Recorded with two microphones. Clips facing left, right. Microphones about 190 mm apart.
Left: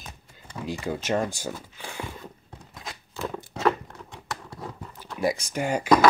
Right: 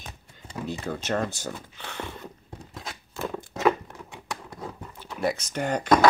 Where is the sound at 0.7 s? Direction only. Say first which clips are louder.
Left 2 dB; 10° left (ahead or behind).